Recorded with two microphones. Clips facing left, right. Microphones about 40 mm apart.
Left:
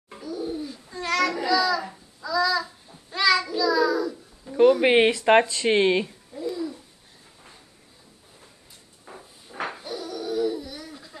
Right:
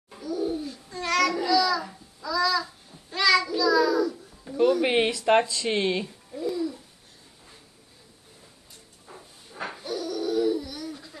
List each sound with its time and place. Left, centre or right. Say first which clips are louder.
0.3 s babbling: right 2 dB; centre
1.4 s child singing: even; centre
2.2 s babbling: left 2 dB; centre
3.1 s child singing: even; centre
4.0 s babbling: right 3 dB; centre
4.6 s speech: left 5 dB; left
6.3 s babbling: right 1 dB; centre
9.1 s a sound: left 3 dB; left
9.8 s a sound: right 2 dB; centre